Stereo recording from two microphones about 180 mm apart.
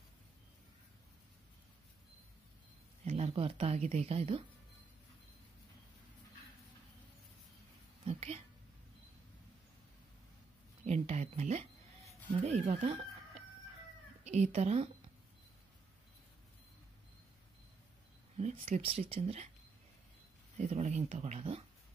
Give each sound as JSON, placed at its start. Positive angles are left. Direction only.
{"t": 3.1, "sound": "speech", "side_deg": -35}
{"t": 8.0, "sound": "a sound", "side_deg": -35}
{"t": 10.9, "sound": "speech", "side_deg": -40}
{"t": 18.4, "sound": "speech", "side_deg": -35}
{"t": 20.5, "sound": "speech", "side_deg": -40}